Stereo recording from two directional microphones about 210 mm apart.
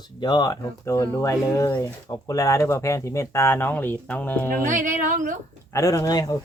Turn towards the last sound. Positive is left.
turn(degrees=15)  # may be behind; listen again after turning